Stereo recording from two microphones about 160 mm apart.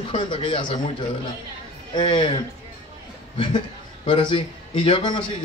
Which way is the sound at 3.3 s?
35° left (ahead or behind).